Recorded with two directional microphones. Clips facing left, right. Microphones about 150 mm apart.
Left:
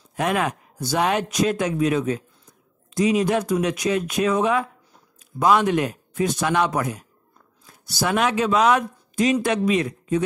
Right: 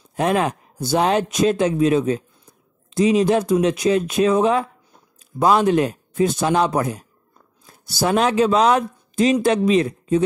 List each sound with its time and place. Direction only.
0.1 s speech: 30° right (ahead or behind)